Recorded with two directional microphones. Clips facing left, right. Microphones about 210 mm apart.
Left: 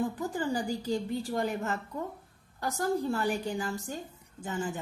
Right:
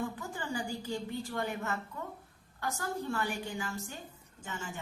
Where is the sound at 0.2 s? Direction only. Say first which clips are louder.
Left 6 dB; 35° left (ahead or behind).